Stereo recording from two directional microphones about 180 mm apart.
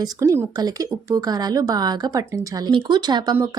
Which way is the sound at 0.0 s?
15° right (ahead or behind).